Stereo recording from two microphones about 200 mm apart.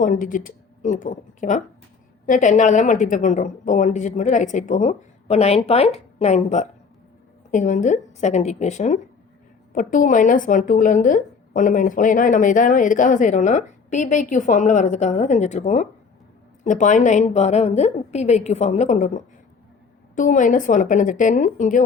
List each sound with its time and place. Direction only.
0.0 s a woman's voice: 40° left (ahead or behind)